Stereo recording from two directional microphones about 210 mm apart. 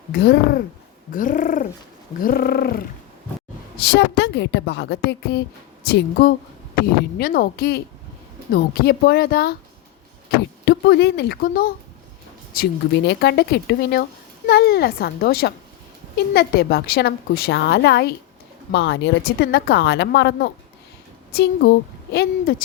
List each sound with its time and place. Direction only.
0.1 s a woman's voice: 50° left (ahead or behind)
1.1 s bird: 40° left (ahead or behind)
3.9 s a woman's voice: 55° left (ahead or behind)
10.7 s a woman's voice: 50° left (ahead or behind)